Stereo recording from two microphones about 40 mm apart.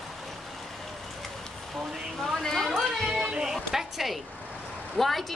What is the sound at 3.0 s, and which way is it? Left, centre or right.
Boat, centre.